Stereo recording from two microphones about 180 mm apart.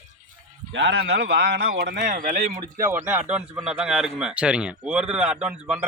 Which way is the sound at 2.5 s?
15° right (ahead or behind).